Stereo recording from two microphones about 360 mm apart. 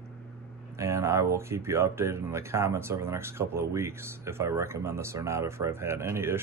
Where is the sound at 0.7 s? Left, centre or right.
Centre.